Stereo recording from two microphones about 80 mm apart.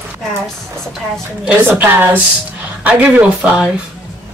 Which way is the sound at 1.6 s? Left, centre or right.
Right.